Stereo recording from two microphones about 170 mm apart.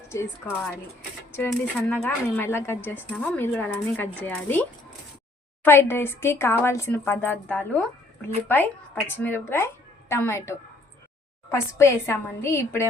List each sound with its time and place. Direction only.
0.1 s a woman's voice: 15° left (ahead or behind)
1.9 s a woman's voice: 10° left (ahead or behind)
5.6 s a woman's voice: 15° left (ahead or behind)